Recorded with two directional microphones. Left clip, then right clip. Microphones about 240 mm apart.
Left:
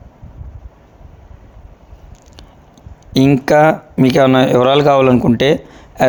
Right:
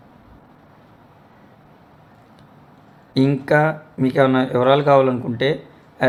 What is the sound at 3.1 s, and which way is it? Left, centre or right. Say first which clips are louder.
Speech: left 6 dB; left.